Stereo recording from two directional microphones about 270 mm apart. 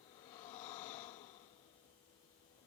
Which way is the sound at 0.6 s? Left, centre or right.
Centre.